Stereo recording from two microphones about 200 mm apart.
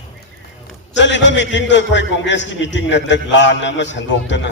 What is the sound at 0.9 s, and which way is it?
A man's voice, 65° left (ahead or behind).